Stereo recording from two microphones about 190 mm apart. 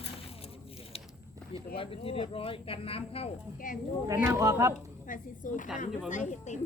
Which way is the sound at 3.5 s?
45° left (ahead or behind).